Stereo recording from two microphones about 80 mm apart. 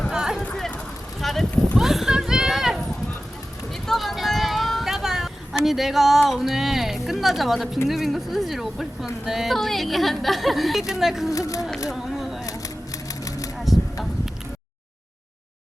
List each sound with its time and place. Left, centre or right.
0.1 s clip-clop: centre
1.2 s a sound: centre
6.2 s a woman's voice: centre
11.3 s speech: left
11.9 s a sound: centre
12.5 s typewriter: left